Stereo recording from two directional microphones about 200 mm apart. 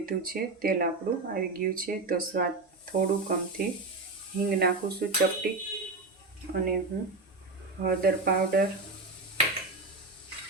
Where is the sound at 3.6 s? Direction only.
45° right (ahead or behind).